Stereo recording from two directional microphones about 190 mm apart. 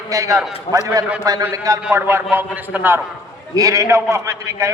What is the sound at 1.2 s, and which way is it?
A man's voice, 20° right (ahead or behind).